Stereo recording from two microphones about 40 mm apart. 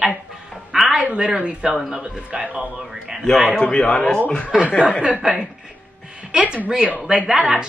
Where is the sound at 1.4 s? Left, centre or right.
Right.